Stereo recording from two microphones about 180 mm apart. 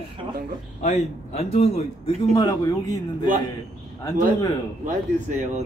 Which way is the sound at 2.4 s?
20° left (ahead or behind).